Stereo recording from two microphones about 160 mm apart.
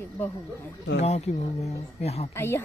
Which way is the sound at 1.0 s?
45° left (ahead or behind).